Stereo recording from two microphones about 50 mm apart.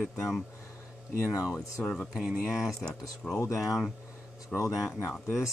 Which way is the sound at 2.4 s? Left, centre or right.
Centre.